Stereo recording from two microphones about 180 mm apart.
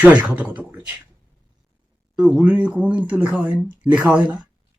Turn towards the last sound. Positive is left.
turn(degrees=-10)  # may be behind; listen again after turning